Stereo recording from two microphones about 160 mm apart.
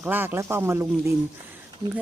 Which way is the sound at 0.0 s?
10° right (ahead or behind).